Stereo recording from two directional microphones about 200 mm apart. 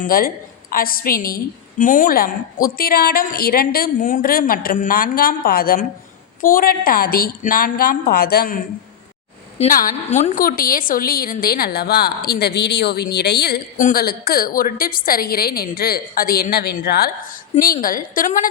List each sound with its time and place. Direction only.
0.0 s a woman's voice: 45° left (ahead or behind)